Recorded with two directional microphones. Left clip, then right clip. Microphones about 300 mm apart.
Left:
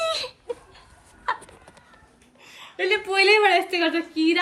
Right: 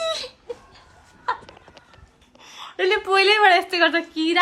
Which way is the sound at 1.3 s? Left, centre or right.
Centre.